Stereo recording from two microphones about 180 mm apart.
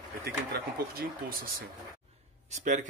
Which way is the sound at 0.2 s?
60° right (ahead or behind).